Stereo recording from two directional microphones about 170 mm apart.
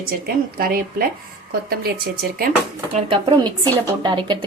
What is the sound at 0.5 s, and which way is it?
Speech, 60° right (ahead or behind).